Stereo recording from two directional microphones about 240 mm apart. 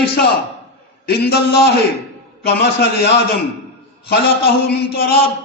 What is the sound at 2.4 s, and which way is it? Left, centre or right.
A man's voice, left.